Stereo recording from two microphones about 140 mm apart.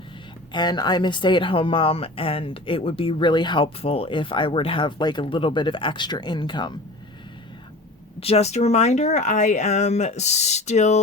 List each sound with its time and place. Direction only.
0.5 s speech: 30° left (ahead or behind)
8.2 s speech: 45° left (ahead or behind)